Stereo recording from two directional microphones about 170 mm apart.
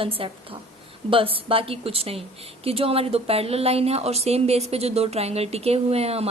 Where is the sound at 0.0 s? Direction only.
30° right (ahead or behind).